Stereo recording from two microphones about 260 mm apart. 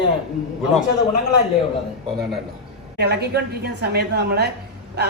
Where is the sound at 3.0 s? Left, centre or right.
Right.